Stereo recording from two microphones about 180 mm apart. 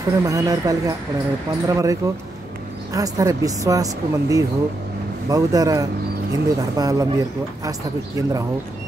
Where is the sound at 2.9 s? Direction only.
20° right (ahead or behind).